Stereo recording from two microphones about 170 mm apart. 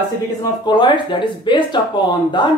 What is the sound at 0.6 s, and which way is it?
Speech, 25° left (ahead or behind).